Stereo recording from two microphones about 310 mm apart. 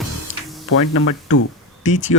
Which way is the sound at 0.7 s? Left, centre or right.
Left.